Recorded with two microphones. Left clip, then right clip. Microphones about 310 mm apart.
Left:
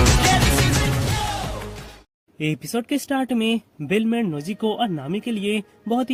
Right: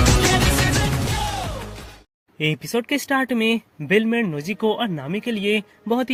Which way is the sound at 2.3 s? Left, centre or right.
Centre.